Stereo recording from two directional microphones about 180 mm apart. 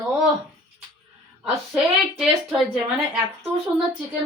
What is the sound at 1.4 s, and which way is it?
Speech, centre (ahead or behind).